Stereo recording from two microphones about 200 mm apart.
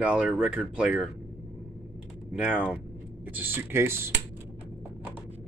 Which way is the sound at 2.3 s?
10° right (ahead or behind).